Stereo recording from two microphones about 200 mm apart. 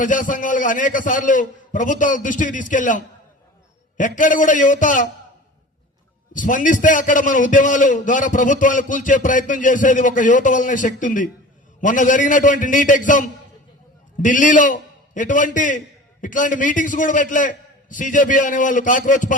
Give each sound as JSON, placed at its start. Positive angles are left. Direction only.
{"t": 0.0, "sound": "a man's voice", "side_deg": 40}
{"t": 6.3, "sound": "a man's voice", "side_deg": 40}